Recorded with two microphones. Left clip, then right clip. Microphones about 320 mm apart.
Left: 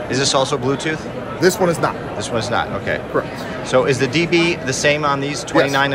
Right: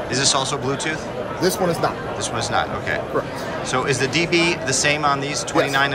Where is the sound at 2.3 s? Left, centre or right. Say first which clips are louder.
Left 3 dB; centre.